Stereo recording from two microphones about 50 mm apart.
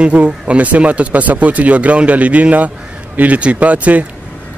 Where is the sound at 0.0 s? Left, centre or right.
Right.